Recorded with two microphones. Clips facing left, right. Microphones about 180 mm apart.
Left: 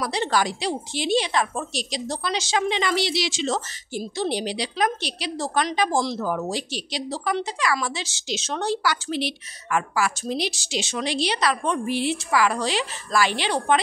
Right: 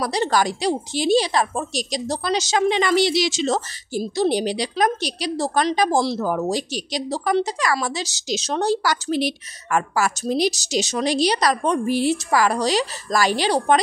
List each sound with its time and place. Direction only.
0.0 s a woman's voice: 40° right (ahead or behind)